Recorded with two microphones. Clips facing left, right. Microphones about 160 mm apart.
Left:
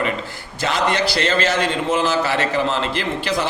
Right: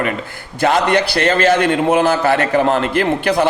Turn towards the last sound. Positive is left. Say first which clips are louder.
# right 7 dB
turn(degrees=-55)  # may be behind; listen again after turning